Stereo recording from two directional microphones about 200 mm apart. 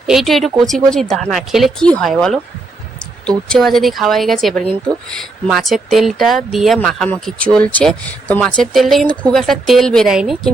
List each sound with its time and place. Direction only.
0.1 s speech: centre (ahead or behind)